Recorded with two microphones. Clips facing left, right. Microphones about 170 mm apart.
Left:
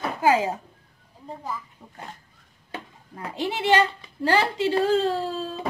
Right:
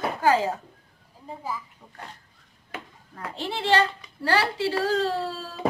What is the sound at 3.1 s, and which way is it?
A woman's voice, 15° left (ahead or behind).